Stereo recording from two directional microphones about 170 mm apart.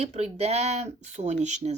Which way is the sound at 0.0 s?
40° right (ahead or behind).